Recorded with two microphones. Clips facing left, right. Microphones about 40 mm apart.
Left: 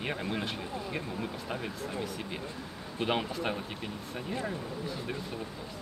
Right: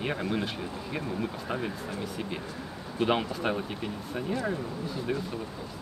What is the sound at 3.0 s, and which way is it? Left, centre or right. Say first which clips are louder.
Speech: right 4 dB; centre.